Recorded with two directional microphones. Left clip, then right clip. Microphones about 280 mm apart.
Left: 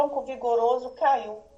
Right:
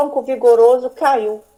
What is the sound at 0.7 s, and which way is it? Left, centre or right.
Speech, right.